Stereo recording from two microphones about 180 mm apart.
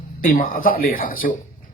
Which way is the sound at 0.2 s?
50° left (ahead or behind).